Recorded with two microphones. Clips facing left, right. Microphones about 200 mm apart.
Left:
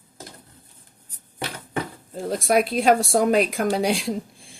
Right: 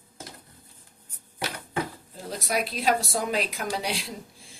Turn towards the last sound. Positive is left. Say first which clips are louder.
# left 9 dB
turn(degrees=50)  # may be behind; listen again after turning